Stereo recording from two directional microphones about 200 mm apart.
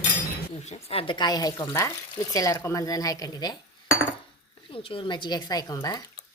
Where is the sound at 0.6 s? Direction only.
30° left (ahead or behind).